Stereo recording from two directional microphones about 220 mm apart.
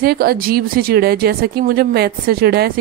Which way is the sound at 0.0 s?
45° right (ahead or behind).